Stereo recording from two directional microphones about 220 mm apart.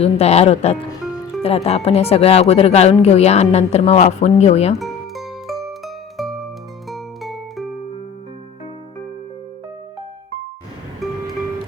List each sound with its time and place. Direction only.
0.0 s speech: 30° left (ahead or behind)
4.8 s music: centre (ahead or behind)